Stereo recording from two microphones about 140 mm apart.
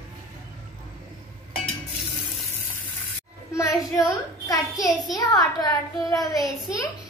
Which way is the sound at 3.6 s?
20° left (ahead or behind).